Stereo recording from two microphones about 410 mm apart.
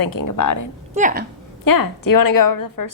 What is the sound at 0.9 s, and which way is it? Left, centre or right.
Speech, centre.